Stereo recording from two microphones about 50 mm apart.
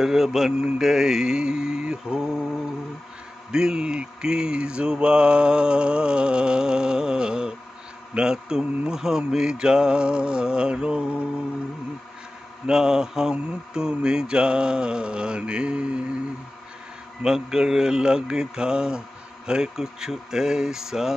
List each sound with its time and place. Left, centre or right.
0.0 s mantra: centre
0.5 s speech: right
0.7 s mantra: centre
3.5 s mantra: centre
12.6 s mantra: centre
17.2 s mantra: centre